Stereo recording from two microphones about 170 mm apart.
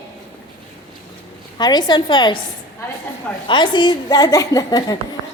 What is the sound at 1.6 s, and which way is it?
Speech, 25° left (ahead or behind).